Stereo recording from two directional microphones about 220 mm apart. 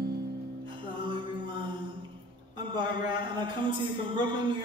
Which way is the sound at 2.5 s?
20° right (ahead or behind).